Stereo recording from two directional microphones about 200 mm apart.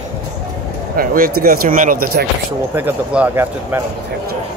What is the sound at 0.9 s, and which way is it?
Speech, 45° right (ahead or behind).